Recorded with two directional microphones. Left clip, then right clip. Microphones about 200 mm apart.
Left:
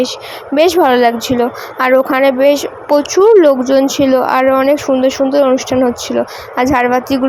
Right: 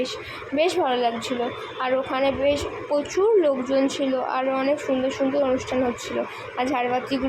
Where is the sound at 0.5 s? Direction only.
45° left (ahead or behind).